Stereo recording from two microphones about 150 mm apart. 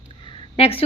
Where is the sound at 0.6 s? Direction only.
40° left (ahead or behind).